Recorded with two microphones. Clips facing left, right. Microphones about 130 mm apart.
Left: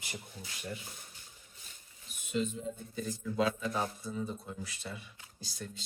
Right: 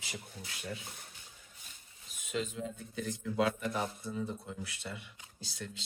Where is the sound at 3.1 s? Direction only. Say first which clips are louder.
Even; 60° right (ahead or behind).